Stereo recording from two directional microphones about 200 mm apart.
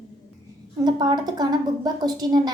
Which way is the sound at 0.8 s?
20° right (ahead or behind).